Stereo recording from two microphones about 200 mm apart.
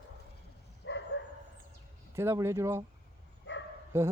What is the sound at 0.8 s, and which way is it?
Dog, 65° left (ahead or behind).